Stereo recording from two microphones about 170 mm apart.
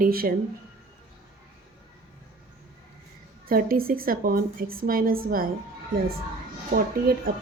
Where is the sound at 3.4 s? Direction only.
60° right (ahead or behind).